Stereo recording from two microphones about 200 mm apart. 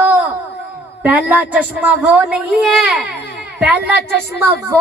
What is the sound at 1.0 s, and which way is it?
A woman's voice, 5° right (ahead or behind).